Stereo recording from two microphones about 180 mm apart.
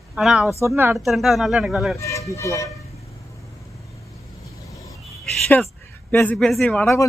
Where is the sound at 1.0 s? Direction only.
Centre (ahead or behind).